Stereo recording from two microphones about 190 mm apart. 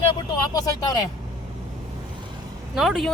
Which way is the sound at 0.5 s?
20° left (ahead or behind).